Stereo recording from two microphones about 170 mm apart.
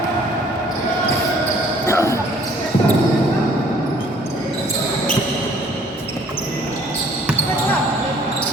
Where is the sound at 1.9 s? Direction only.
15° left (ahead or behind).